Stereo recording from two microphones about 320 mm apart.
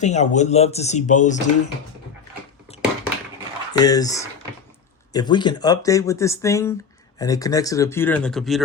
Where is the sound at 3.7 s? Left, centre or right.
Centre.